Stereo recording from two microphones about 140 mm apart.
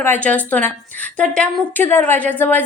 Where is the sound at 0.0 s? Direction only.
10° left (ahead or behind).